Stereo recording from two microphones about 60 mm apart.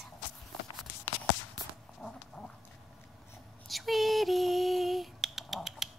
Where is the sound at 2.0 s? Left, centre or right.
Centre.